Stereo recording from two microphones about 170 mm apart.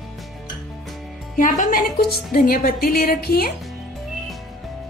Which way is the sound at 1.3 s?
50° left (ahead or behind).